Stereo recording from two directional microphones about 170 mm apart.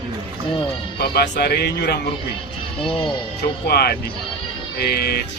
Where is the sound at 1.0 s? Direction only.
75° left (ahead or behind).